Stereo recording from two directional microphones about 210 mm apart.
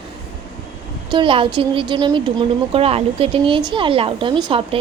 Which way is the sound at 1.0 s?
25° right (ahead or behind).